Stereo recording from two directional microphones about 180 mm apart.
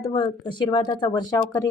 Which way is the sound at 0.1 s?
25° left (ahead or behind).